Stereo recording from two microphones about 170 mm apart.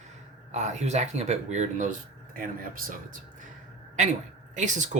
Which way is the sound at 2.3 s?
55° right (ahead or behind).